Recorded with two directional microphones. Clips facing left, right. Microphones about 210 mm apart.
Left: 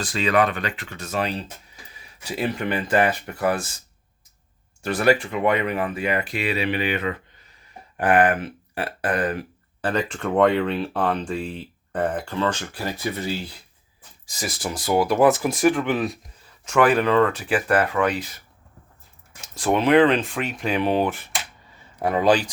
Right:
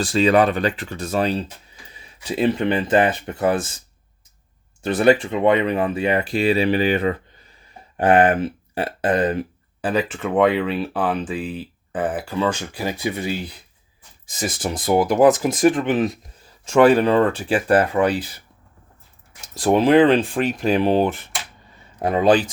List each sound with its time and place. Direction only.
0.0 s speech: 35° right (ahead or behind)
4.8 s speech: 25° right (ahead or behind)
9.8 s speech: 5° right (ahead or behind); by 18.3 s 30° right (ahead or behind)
19.5 s speech: 35° right (ahead or behind)
21.9 s speech: 20° right (ahead or behind)